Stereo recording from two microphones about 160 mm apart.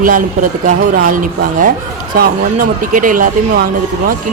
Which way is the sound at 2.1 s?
60° right (ahead or behind).